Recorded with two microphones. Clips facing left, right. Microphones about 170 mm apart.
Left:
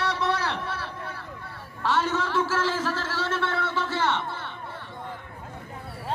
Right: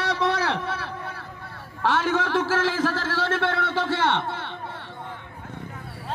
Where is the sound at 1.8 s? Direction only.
60° right (ahead or behind).